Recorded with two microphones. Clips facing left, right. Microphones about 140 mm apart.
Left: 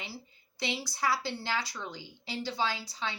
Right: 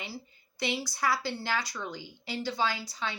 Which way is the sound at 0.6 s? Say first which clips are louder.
Right 2 dB; 25° left (ahead or behind).